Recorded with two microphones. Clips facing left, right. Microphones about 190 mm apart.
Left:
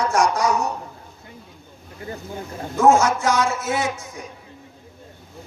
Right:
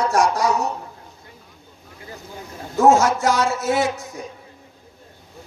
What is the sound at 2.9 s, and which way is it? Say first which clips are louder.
A woman's voice: right 1 dB; 40° right (ahead or behind).